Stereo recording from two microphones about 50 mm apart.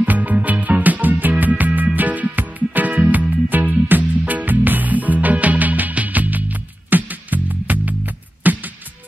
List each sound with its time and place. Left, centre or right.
0.0 s music: right